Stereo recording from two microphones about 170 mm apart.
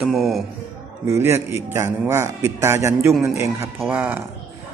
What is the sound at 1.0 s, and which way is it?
A man's voice, 15° right (ahead or behind).